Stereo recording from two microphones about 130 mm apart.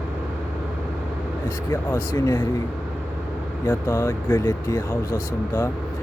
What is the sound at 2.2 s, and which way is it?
Speech, 30° left (ahead or behind).